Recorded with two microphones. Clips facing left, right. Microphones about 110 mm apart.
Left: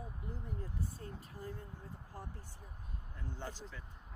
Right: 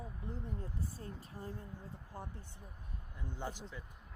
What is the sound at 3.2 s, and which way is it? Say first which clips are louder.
Speech: right 2 dB; 15° right (ahead or behind).